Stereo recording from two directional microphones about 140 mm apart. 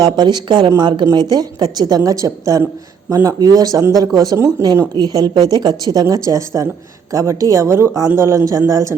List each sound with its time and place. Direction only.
0.0 s speech: 30° right (ahead or behind)